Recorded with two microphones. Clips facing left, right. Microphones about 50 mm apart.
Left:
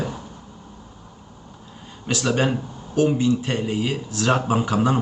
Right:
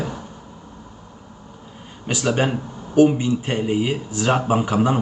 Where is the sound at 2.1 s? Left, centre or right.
Centre.